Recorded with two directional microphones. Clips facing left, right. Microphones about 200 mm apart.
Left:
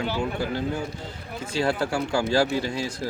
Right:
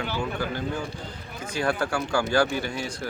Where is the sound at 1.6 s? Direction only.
25° left (ahead or behind).